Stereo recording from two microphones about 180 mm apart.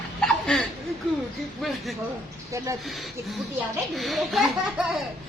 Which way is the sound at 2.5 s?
15° right (ahead or behind).